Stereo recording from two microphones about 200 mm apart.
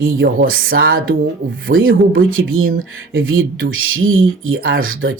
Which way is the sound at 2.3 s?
90° right.